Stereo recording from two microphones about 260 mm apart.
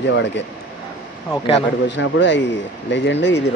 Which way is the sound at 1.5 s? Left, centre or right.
Left.